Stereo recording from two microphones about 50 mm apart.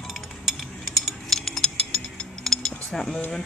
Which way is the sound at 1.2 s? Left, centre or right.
Centre.